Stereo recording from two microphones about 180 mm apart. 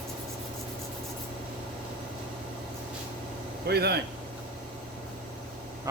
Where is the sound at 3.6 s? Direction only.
65° right (ahead or behind).